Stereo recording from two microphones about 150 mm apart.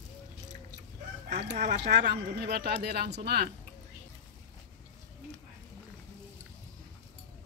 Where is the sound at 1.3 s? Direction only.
60° right (ahead or behind); by 3.5 s 90° right.